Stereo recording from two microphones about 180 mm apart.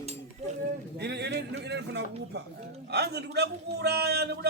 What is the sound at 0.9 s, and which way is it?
A man's voice, 70° right (ahead or behind).